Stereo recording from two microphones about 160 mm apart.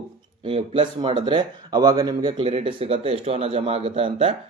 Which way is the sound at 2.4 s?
35° right (ahead or behind).